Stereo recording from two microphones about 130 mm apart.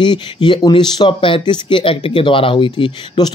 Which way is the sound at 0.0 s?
35° left (ahead or behind).